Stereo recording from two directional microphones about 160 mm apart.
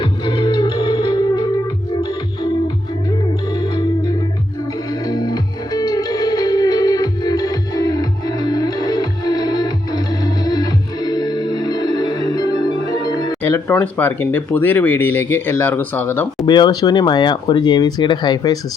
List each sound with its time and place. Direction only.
0.0 s music: 30° left (ahead or behind)
3.5 s music: 30° left (ahead or behind)
13.4 s speech: 15° left (ahead or behind)
16.5 s speech: 25° left (ahead or behind)